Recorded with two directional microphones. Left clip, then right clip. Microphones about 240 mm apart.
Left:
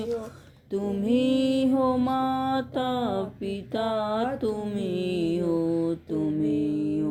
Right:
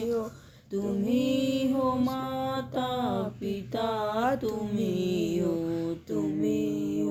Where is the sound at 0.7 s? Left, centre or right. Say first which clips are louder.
Left 3 dB; left.